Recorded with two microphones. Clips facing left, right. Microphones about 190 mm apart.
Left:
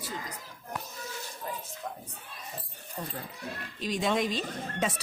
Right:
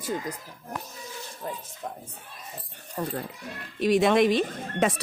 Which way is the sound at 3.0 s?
75° right (ahead or behind).